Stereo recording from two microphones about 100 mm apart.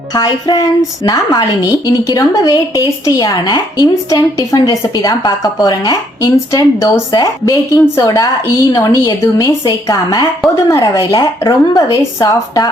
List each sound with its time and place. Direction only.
0.1 s a woman's voice: 40° left (ahead or behind)
11.2 s a woman's voice: 40° left (ahead or behind)